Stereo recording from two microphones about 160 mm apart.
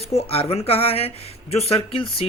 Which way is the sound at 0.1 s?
40° left (ahead or behind).